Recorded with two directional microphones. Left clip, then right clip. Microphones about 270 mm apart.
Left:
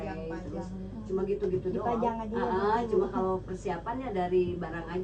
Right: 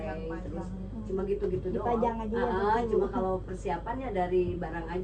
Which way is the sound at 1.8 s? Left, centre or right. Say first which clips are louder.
Right 4 dB; left.